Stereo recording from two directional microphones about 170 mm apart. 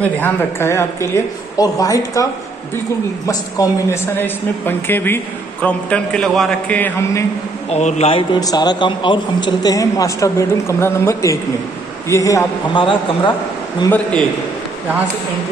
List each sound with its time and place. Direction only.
0.0 s a woman's voice: 10° left (ahead or behind)
3.3 s a woman's voice: 20° left (ahead or behind)
7.7 s a man's voice: 40° left (ahead or behind)
13.8 s a woman's voice: 10° left (ahead or behind)